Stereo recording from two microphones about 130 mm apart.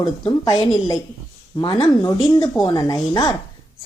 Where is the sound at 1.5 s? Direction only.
35° left (ahead or behind).